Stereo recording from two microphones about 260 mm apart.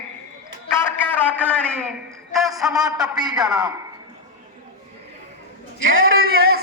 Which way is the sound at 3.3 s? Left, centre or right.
Centre.